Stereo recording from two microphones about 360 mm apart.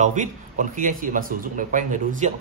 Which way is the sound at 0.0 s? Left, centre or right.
Centre.